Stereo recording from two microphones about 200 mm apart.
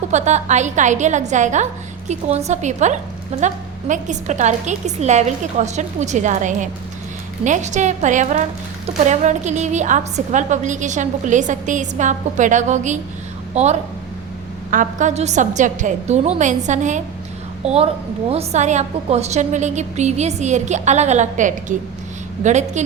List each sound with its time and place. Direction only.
0.1 s a woman's voice: 35° right (ahead or behind)
18.3 s a woman's voice: 35° right (ahead or behind)